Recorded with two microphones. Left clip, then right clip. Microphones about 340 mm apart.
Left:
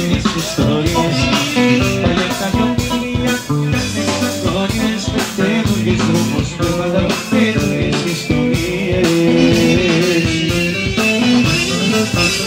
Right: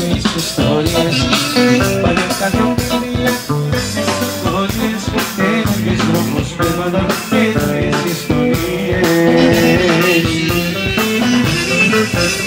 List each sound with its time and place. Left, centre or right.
9.4 s music: right